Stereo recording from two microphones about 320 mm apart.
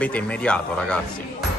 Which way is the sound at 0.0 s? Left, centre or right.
Centre.